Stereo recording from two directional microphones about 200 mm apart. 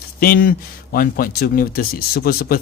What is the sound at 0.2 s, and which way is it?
Speech, 45° left (ahead or behind).